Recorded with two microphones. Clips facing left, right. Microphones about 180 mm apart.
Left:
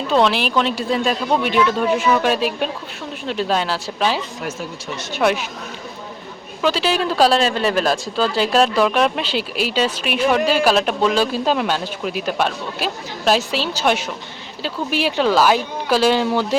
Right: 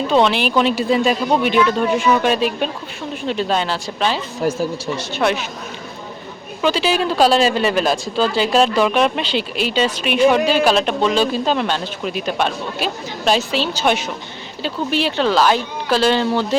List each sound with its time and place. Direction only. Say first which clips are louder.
0.1 s speech: even; centre (ahead or behind)
4.4 s speech: right 8 dB; 35° right (ahead or behind)
5.1 s speech: left 1 dB; 5° left (ahead or behind)
6.6 s speech: right 1 dB; centre (ahead or behind)